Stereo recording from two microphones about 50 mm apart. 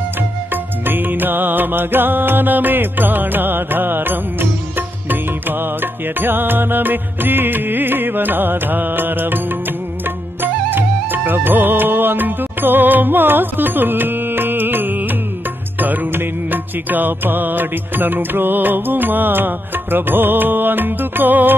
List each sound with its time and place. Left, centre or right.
0.5 s music: right